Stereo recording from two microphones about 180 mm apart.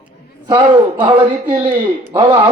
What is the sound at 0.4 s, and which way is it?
Speech, 25° right (ahead or behind).